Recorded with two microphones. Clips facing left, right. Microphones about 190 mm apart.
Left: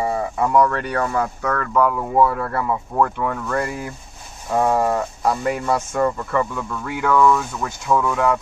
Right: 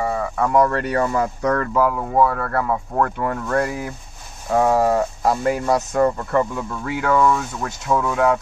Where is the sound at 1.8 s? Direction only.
Centre (ahead or behind).